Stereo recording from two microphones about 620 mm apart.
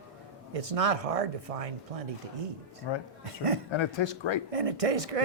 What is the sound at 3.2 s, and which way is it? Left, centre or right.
Speech, right.